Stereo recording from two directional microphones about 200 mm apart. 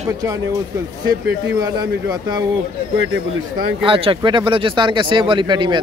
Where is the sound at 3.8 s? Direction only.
25° right (ahead or behind).